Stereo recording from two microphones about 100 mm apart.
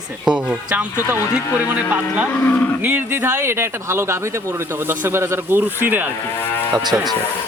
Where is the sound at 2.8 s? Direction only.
20° right (ahead or behind).